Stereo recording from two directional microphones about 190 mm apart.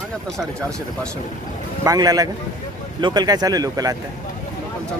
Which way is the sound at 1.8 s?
20° right (ahead or behind).